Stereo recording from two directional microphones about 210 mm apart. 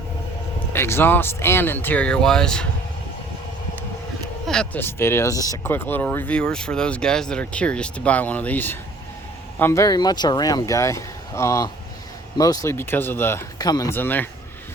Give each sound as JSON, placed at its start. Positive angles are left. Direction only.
{"t": 0.7, "sound": "speech", "side_deg": 10}
{"t": 4.4, "sound": "speech", "side_deg": 5}